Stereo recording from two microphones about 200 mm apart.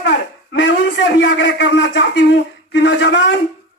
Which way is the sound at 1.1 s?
65° left (ahead or behind).